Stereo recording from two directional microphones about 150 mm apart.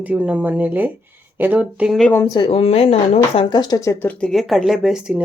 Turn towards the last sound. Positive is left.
turn(degrees=-5)  # may be behind; listen again after turning